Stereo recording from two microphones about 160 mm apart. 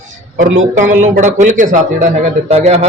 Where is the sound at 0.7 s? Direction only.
50° right (ahead or behind).